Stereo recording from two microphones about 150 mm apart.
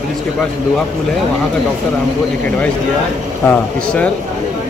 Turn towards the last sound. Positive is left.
turn(degrees=5)  # may be behind; listen again after turning